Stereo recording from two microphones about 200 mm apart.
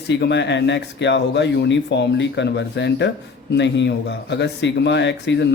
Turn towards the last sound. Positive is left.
turn(degrees=60)  # may be behind; listen again after turning